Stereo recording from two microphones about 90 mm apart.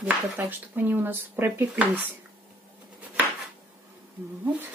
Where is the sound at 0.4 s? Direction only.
20° right (ahead or behind).